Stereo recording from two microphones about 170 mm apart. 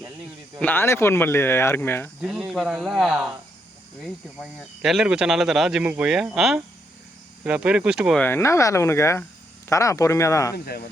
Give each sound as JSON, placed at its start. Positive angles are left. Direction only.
{"t": 0.6, "sound": "speech", "side_deg": 10}
{"t": 2.2, "sound": "speech", "side_deg": -5}
{"t": 8.2, "sound": "speech", "side_deg": 15}